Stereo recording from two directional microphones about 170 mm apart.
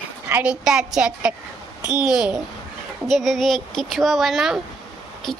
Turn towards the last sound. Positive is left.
turn(degrees=0)  # may be behind; listen again after turning